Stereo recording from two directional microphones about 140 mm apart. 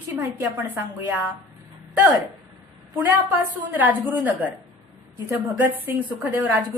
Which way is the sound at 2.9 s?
10° right (ahead or behind).